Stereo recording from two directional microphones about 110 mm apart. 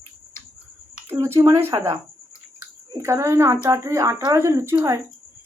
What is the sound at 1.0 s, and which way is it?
Speech, 25° right (ahead or behind).